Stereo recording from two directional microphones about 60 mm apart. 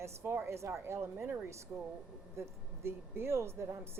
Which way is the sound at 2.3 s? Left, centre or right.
Right.